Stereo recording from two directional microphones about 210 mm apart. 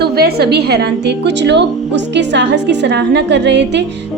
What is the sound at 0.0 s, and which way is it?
A woman's voice, 50° right (ahead or behind).